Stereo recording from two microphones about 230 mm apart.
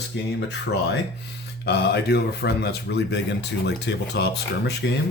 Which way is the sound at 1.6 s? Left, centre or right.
Left.